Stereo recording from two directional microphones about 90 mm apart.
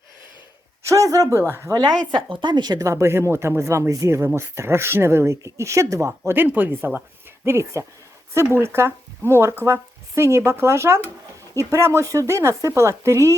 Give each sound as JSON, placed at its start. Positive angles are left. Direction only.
{"t": 0.9, "sound": "speech", "side_deg": -35}
{"t": 1.7, "sound": "speech", "side_deg": -50}
{"t": 7.4, "sound": "speech", "side_deg": -30}